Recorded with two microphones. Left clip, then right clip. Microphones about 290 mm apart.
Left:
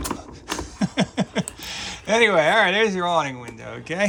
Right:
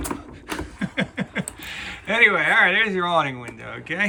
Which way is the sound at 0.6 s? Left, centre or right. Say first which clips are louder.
Left 2 dB; centre.